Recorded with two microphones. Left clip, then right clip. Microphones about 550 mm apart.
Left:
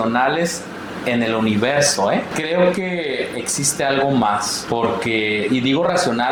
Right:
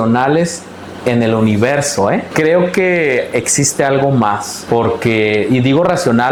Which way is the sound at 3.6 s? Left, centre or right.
Right.